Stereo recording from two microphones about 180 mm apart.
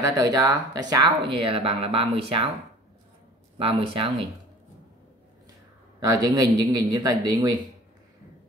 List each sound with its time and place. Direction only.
0.0 s speech: 20° right (ahead or behind)
3.5 s speech: 30° right (ahead or behind)
5.9 s speech: 20° right (ahead or behind)